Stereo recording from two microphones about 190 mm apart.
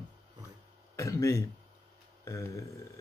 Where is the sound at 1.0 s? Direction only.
15° left (ahead or behind).